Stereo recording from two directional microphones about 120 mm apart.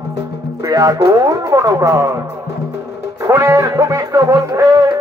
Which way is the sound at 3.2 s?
25° right (ahead or behind).